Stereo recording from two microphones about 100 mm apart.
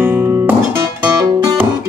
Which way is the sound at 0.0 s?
20° right (ahead or behind).